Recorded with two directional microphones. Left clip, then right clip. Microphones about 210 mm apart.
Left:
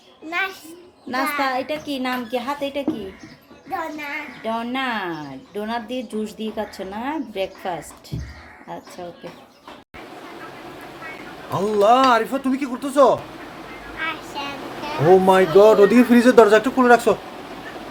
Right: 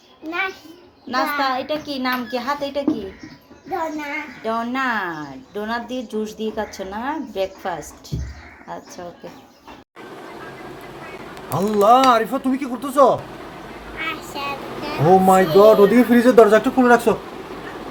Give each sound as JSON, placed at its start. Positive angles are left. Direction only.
{"t": 1.1, "sound": "speech", "side_deg": 25}
{"t": 4.4, "sound": "speech", "side_deg": 20}
{"t": 11.5, "sound": "speech", "side_deg": 0}
{"t": 14.0, "sound": "a sound", "side_deg": 0}
{"t": 15.5, "sound": "speech", "side_deg": 20}
{"t": 15.9, "sound": "speech", "side_deg": 10}